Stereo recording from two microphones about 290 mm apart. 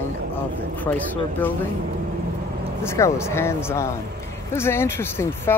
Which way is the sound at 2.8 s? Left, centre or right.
Centre.